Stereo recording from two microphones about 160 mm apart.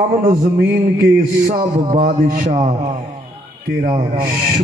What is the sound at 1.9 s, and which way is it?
A man's voice, 55° right (ahead or behind).